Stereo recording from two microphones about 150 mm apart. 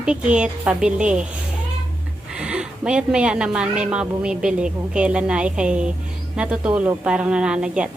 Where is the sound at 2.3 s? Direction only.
5° right (ahead or behind).